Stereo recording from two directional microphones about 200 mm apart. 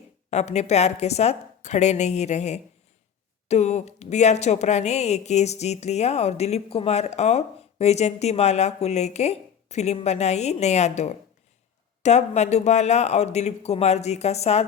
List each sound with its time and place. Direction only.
0.3 s a woman's voice: 35° left (ahead or behind)